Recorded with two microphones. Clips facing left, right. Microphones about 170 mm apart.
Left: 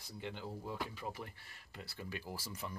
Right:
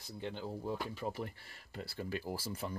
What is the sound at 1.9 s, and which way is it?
Speech, 35° right (ahead or behind).